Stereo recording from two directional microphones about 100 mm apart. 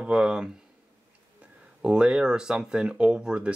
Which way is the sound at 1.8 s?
10° right (ahead or behind).